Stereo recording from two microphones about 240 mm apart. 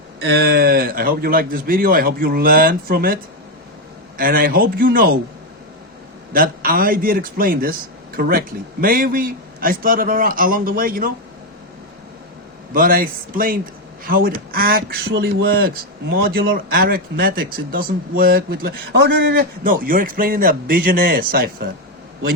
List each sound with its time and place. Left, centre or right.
0.3 s a man's voice: right
4.2 s a man's voice: right
6.3 s a man's voice: right
12.7 s a man's voice: right